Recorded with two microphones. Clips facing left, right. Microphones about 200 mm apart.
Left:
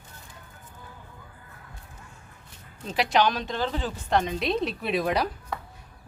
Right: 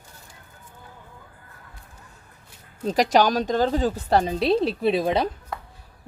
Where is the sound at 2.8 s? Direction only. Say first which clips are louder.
Right 4 dB; 40° right (ahead or behind); by 5.3 s 25° right (ahead or behind).